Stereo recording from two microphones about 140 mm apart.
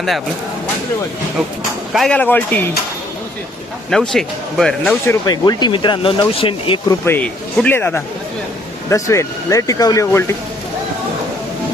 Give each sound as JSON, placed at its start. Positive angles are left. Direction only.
{"t": 1.9, "sound": "speech", "side_deg": 0}
{"t": 2.1, "sound": "speech", "side_deg": 10}
{"t": 3.8, "sound": "a man's voice", "side_deg": 5}
{"t": 5.0, "sound": "speech", "side_deg": 30}
{"t": 6.8, "sound": "speech", "side_deg": 15}